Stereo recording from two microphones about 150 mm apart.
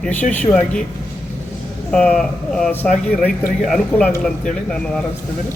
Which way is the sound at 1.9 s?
5° left (ahead or behind).